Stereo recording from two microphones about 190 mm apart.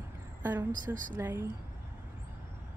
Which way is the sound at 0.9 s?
15° right (ahead or behind).